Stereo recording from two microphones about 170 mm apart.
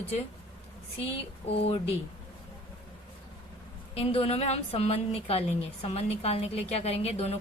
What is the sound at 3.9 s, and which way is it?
A woman's voice, 35° left (ahead or behind).